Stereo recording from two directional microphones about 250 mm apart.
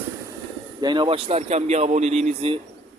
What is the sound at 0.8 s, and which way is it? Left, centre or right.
A man's voice, centre.